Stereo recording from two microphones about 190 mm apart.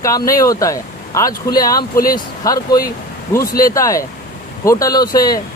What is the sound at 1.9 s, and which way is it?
Speech, 50° left (ahead or behind).